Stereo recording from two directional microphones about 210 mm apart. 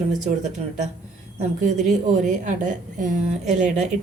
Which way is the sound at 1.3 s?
35° right (ahead or behind).